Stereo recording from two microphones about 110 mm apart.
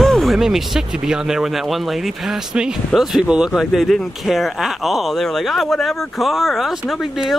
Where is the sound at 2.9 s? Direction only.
5° right (ahead or behind).